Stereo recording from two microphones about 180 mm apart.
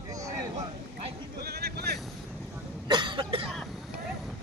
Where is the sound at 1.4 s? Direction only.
60° right (ahead or behind).